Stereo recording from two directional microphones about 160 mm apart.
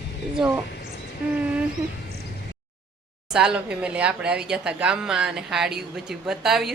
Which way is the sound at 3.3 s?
5° right (ahead or behind).